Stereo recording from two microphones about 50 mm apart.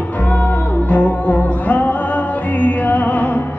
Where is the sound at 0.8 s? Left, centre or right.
Left.